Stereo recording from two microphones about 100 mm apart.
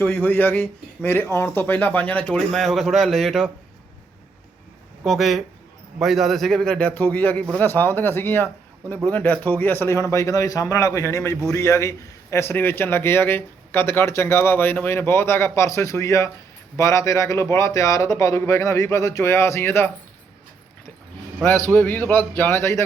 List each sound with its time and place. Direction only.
0.1 s a man's voice: 15° left (ahead or behind)
2.5 s a man's voice: centre (ahead or behind)
5.0 s a man's voice: centre (ahead or behind); by 19.9 s 25° left (ahead or behind)
21.5 s a man's voice: 30° right (ahead or behind)
21.8 s a man's voice: 20° left (ahead or behind)